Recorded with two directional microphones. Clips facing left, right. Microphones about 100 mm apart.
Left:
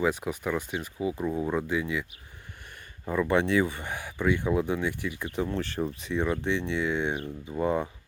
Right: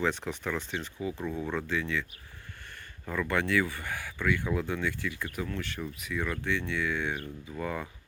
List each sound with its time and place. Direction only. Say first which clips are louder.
0.0 s speech: left 3 dB; 10° left (ahead or behind)
3.1 s speech: left 5 dB; 20° left (ahead or behind)